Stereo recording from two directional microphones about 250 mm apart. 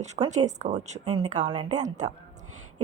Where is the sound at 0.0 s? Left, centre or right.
Right.